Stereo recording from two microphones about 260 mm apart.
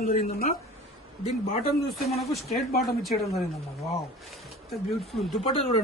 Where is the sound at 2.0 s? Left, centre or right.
Centre.